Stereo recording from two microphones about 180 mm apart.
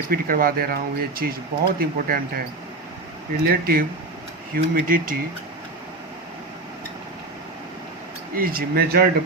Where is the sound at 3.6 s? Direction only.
55° right (ahead or behind).